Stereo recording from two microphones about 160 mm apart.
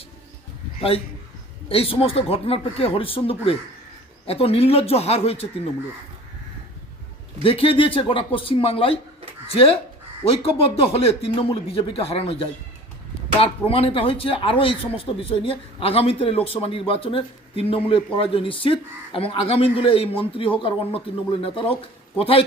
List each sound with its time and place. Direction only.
0.8 s a man's voice: 35° left (ahead or behind)
7.4 s a man's voice: 35° left (ahead or behind)